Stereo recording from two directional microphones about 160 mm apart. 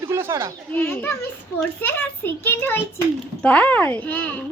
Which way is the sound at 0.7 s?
10° left (ahead or behind).